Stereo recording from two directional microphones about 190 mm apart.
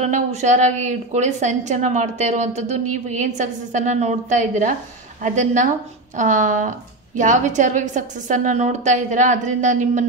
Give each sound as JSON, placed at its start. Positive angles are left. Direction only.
{"t": 0.0, "sound": "a woman's voice", "side_deg": -35}